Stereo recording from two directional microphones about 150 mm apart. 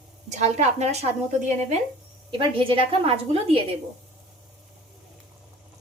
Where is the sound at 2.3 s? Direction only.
35° right (ahead or behind).